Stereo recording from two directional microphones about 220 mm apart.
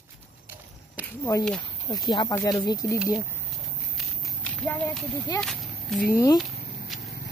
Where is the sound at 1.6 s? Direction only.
20° left (ahead or behind).